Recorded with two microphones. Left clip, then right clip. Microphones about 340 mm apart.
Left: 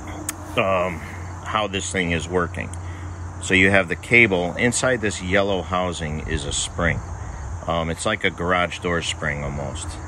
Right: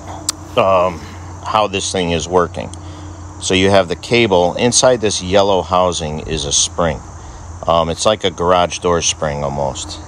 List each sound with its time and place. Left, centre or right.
0.6 s speech: centre